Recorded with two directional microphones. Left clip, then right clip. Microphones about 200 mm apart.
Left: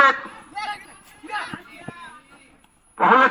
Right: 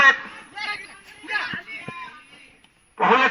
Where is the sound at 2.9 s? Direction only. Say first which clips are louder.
Left 2 dB; 40° right (ahead or behind).